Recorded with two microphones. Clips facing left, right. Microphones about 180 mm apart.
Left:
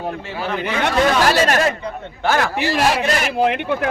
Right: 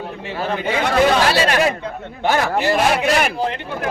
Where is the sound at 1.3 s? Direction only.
45° left (ahead or behind).